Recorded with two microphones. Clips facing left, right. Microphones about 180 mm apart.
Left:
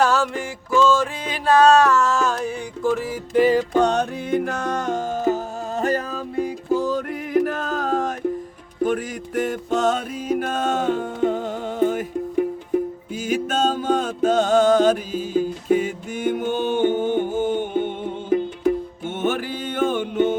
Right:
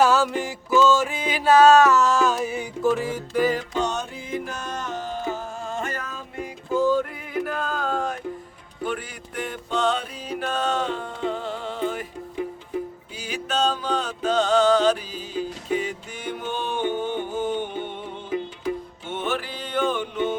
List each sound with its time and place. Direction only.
0.0 s music: centre (ahead or behind)
3.3 s music: 30° left (ahead or behind)
3.8 s music: 60° left (ahead or behind)